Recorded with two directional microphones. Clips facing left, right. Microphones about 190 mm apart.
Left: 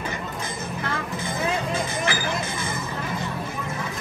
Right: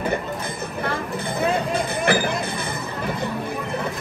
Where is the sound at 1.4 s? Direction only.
60° right (ahead or behind).